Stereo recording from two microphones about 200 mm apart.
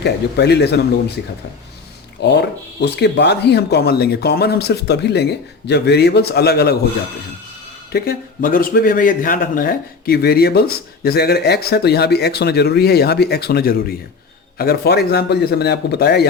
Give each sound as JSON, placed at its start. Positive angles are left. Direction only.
{"t": 0.0, "sound": "speech", "side_deg": 55}
{"t": 2.2, "sound": "speech", "side_deg": 60}
{"t": 7.9, "sound": "a man's voice", "side_deg": 45}